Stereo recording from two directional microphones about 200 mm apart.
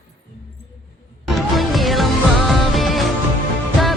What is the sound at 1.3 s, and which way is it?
Music, centre (ahead or behind).